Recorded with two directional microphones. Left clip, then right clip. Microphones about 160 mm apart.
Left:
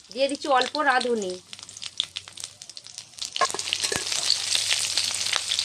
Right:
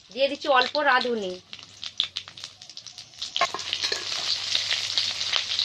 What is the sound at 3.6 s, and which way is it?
Frying, 35° left (ahead or behind).